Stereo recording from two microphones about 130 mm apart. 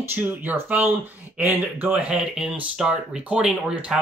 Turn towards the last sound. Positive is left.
turn(degrees=-5)  # may be behind; listen again after turning